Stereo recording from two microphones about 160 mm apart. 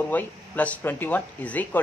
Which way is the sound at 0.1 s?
10° left (ahead or behind).